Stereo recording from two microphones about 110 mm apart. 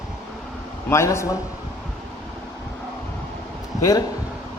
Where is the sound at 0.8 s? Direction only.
25° left (ahead or behind).